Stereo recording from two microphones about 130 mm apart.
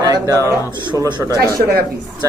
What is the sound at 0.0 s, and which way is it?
Speech, 30° right (ahead or behind).